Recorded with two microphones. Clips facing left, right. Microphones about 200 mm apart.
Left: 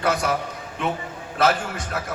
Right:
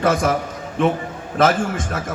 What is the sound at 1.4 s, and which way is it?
Speech, 50° right (ahead or behind).